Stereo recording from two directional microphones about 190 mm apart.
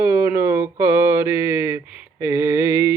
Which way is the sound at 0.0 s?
15° right (ahead or behind).